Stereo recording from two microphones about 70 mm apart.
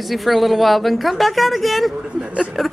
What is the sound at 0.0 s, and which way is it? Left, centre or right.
A woman's voice, centre.